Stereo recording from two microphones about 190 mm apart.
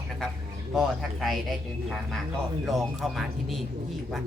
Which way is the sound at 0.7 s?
Centre (ahead or behind).